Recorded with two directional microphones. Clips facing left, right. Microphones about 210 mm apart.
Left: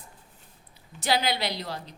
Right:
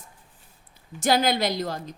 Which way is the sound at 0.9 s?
45° right (ahead or behind).